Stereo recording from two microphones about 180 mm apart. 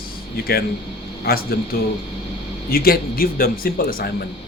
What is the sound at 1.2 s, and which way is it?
Speech, 60° left (ahead or behind).